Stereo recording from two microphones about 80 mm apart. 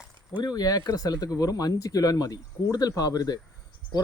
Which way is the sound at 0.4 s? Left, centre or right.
Left.